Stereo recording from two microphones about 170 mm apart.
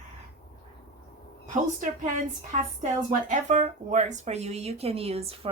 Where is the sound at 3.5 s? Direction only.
45° right (ahead or behind).